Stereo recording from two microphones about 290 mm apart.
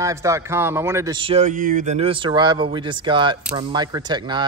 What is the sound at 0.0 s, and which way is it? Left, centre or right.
Speech, centre.